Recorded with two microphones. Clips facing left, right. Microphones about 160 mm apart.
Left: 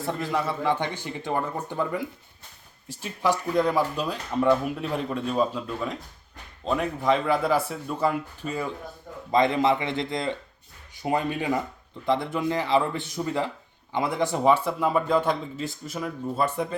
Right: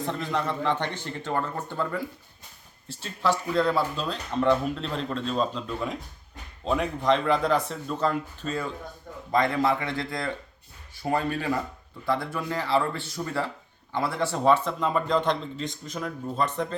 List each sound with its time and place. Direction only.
0.0 s a man's voice: 5° left (ahead or behind)